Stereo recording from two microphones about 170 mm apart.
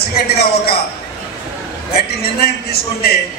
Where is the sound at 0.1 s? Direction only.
65° left (ahead or behind).